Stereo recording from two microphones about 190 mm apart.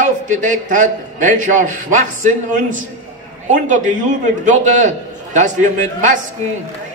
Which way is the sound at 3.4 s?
40° right (ahead or behind).